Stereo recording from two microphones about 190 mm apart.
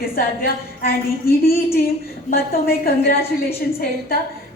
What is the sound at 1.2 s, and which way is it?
A woman's voice, 55° left (ahead or behind).